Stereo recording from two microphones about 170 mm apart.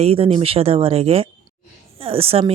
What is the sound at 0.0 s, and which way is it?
Speech, 35° right (ahead or behind).